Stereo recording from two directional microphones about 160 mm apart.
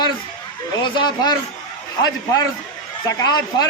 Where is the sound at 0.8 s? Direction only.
30° left (ahead or behind).